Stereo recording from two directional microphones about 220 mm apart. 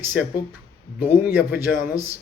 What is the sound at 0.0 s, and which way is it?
Speech, 5° right (ahead or behind).